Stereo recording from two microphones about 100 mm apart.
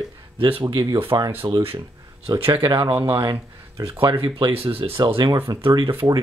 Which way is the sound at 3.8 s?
65° right (ahead or behind).